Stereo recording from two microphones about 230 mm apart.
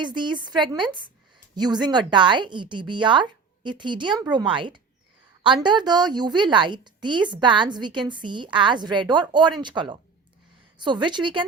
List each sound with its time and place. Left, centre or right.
0.0 s a woman's voice: centre